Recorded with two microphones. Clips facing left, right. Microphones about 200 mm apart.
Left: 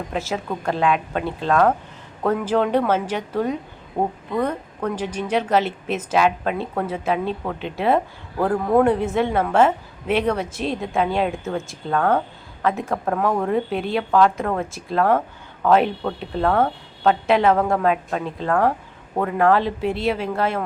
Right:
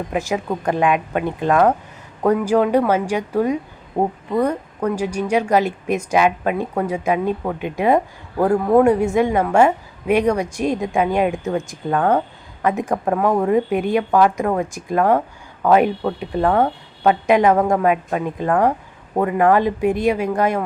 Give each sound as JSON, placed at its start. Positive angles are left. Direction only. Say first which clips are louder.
{"t": 0.1, "sound": "a woman's voice", "louder": "right 4 dB", "side_deg": -15}